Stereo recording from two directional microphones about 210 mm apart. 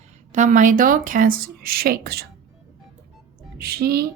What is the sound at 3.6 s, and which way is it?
Speech, 50° right (ahead or behind).